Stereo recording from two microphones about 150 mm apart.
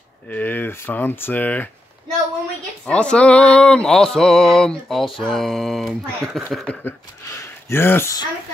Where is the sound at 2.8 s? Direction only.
5° left (ahead or behind).